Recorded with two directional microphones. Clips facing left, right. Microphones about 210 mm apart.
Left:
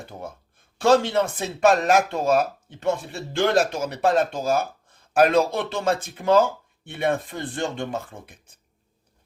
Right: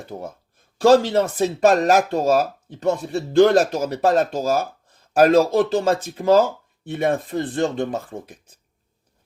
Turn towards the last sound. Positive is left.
turn(degrees=-35)  # may be behind; listen again after turning